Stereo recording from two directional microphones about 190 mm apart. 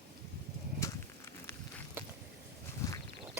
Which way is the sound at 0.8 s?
15° left (ahead or behind).